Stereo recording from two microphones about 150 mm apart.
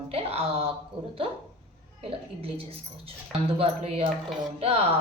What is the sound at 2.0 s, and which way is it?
A woman's voice, 40° right (ahead or behind).